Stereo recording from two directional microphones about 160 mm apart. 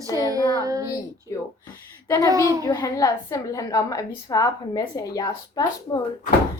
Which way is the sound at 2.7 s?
20° left (ahead or behind).